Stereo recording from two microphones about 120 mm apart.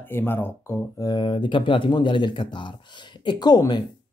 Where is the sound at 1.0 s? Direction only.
35° left (ahead or behind).